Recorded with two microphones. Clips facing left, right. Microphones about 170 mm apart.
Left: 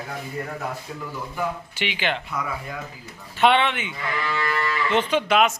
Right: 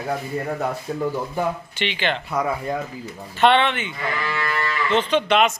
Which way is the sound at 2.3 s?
40° right (ahead or behind).